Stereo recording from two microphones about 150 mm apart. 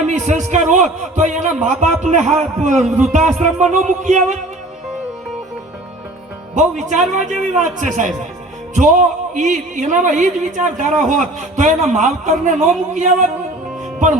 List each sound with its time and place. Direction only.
0.0 s a man's voice: 55° right (ahead or behind)
6.5 s a man's voice: 55° right (ahead or behind)